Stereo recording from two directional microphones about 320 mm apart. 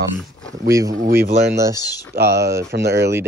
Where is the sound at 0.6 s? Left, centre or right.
Centre.